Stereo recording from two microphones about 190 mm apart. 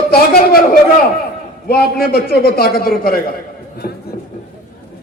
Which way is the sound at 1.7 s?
55° left (ahead or behind).